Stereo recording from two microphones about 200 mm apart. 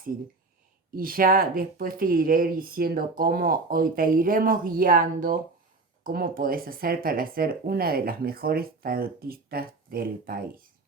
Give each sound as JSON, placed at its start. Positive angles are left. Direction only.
{"t": 0.9, "sound": "speech", "side_deg": -45}